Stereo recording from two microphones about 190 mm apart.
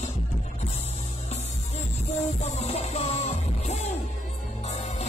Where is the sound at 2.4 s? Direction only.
35° left (ahead or behind).